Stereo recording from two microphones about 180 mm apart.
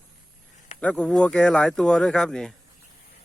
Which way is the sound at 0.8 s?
5° left (ahead or behind).